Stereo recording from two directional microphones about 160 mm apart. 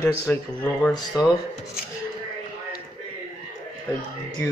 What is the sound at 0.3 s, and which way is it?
Speech, 10° left (ahead or behind).